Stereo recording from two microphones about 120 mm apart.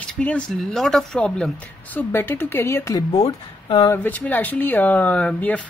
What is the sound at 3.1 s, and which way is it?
Speech, 50° left (ahead or behind).